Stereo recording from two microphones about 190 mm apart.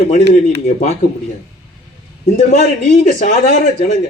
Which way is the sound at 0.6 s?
35° left (ahead or behind).